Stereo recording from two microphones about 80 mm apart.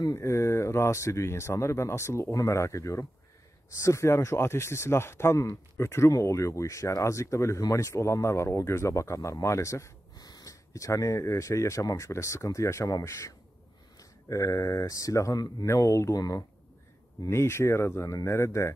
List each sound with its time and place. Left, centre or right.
0.1 s speech: left
10.1 s speech: left
17.3 s speech: left